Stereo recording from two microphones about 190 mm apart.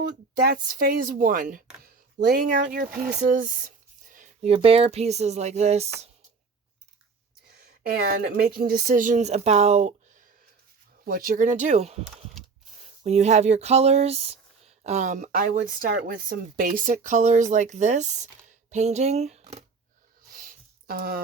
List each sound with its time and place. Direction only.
0.3 s speech: 50° right (ahead or behind); by 6.1 s 35° right (ahead or behind)
7.9 s speech: 50° right (ahead or behind); by 9.9 s 35° right (ahead or behind)
11.0 s speech: 50° right (ahead or behind); by 19.6 s 35° right (ahead or behind)
20.3 s a sound: 45° right (ahead or behind)